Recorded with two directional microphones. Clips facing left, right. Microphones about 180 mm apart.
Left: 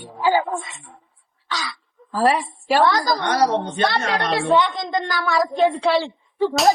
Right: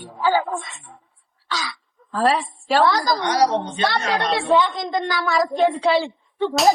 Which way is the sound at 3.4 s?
55° left (ahead or behind).